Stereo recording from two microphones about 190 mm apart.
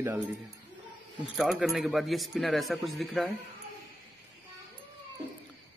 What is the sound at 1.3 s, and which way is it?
Speech, centre (ahead or behind).